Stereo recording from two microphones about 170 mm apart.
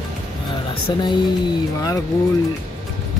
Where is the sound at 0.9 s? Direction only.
25° left (ahead or behind).